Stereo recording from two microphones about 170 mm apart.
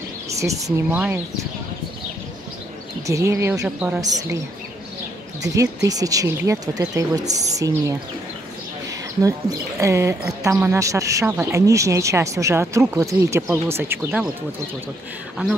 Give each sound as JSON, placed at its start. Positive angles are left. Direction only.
{"t": 0.4, "sound": "speech", "side_deg": -20}
{"t": 0.9, "sound": "speech", "side_deg": -10}
{"t": 3.1, "sound": "speech", "side_deg": -20}
{"t": 4.0, "sound": "speech", "side_deg": -20}
{"t": 5.4, "sound": "speech", "side_deg": -20}
{"t": 9.8, "sound": "speech", "side_deg": -15}